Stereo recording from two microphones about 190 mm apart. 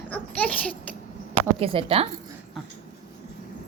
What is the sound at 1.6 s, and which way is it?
Speech, 30° right (ahead or behind).